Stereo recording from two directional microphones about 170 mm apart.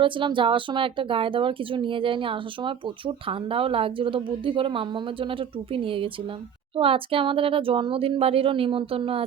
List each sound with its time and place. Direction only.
0.0 s speech: 30° right (ahead or behind)